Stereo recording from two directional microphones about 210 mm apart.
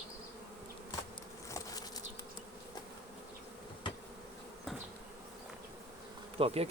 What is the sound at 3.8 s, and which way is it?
Bee, 20° left (ahead or behind).